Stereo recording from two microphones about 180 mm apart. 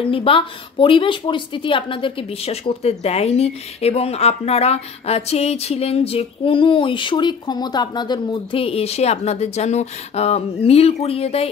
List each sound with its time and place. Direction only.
0.0 s speech: 30° left (ahead or behind)